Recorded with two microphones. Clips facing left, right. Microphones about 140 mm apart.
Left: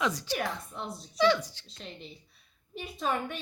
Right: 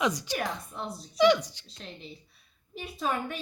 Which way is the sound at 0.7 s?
Centre (ahead or behind).